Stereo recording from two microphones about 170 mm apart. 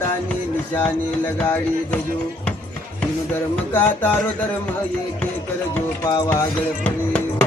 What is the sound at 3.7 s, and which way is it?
Music, 10° left (ahead or behind).